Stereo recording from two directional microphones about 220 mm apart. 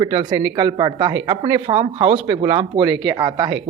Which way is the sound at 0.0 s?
20° right (ahead or behind).